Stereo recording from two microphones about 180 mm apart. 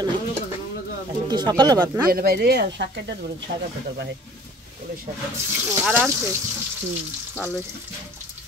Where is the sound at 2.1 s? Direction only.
60° right (ahead or behind).